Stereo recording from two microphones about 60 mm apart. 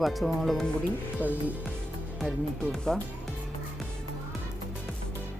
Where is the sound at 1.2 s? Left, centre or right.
Right.